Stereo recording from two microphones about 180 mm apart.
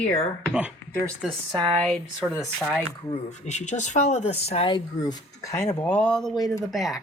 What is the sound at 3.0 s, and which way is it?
Speech, 40° left (ahead or behind).